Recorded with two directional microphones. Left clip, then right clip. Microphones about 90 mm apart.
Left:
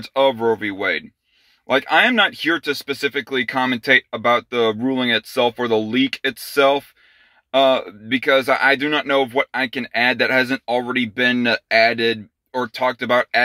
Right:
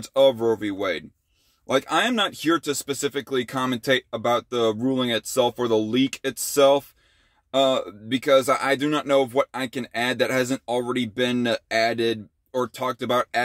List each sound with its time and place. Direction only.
0.0 s speech: 40° right (ahead or behind)